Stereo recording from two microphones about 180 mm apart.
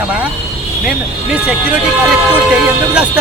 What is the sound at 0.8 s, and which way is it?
Speech, 5° right (ahead or behind).